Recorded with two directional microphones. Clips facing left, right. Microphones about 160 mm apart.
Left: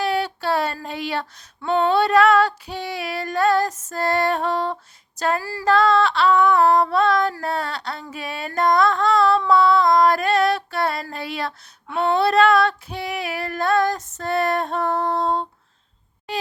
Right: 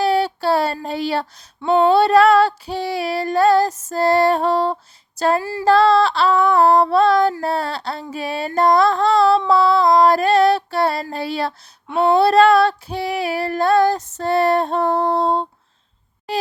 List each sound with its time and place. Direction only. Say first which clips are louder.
0.0 s female singing: right 5 dB; 30° right (ahead or behind)
5.4 s music: right 6 dB; 20° right (ahead or behind)
5.6 s female singing: right 3 dB; 35° right (ahead or behind)
7.4 s a sound: right 4 dB; 30° right (ahead or behind)
9.5 s female singing: right 2 dB; 35° right (ahead or behind)
16.3 s a sound: right 5 dB; 35° right (ahead or behind)